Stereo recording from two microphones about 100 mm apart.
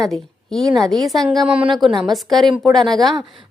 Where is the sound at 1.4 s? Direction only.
10° right (ahead or behind).